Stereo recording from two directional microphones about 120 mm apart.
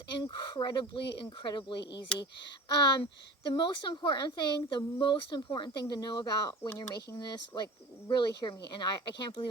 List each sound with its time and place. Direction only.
0.2 s speech: 40° left (ahead or behind)
6.7 s speech: 20° left (ahead or behind)
7.2 s speech: 35° left (ahead or behind)